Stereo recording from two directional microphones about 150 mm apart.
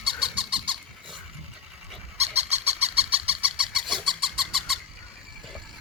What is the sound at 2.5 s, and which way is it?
Chicken, 45° right (ahead or behind).